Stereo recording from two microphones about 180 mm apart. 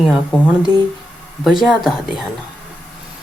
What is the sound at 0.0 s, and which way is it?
Speech, 5° right (ahead or behind).